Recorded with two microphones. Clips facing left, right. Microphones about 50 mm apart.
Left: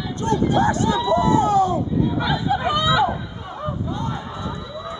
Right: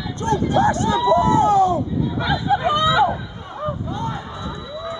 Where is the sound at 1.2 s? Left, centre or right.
Right.